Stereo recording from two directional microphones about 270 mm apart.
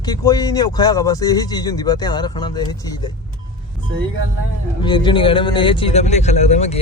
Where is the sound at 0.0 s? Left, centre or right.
Centre.